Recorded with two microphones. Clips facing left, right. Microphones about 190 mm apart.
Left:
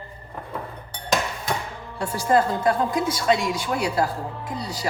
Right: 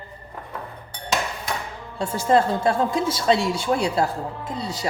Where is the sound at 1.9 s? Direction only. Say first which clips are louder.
Right 1 dB; 20° right (ahead or behind).